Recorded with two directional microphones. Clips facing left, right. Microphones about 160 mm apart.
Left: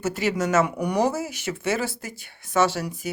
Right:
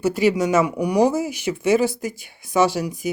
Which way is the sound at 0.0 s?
15° right (ahead or behind).